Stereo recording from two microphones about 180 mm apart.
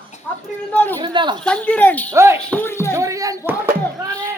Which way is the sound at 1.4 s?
5° left (ahead or behind).